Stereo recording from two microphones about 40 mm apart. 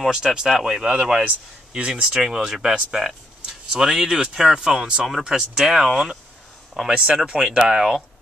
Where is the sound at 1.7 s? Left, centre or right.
Centre.